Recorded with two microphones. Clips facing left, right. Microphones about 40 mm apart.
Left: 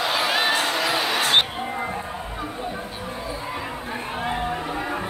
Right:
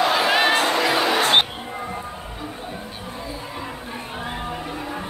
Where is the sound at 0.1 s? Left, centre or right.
Centre.